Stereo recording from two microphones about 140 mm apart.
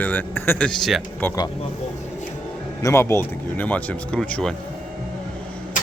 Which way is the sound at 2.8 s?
20° left (ahead or behind).